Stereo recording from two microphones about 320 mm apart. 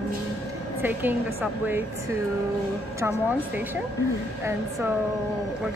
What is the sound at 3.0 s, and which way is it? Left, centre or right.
Speech, centre.